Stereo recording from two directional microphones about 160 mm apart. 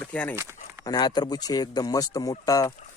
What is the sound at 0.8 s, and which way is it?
Speech, 25° left (ahead or behind).